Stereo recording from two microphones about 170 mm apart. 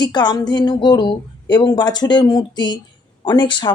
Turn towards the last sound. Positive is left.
turn(degrees=25)  # may be behind; listen again after turning